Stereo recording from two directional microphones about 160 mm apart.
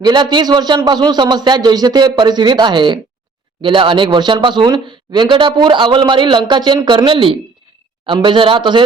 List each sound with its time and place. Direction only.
0.0 s speech: 30° right (ahead or behind)